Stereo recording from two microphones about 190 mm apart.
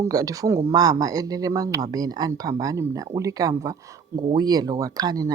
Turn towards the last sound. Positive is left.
turn(degrees=-20)  # may be behind; listen again after turning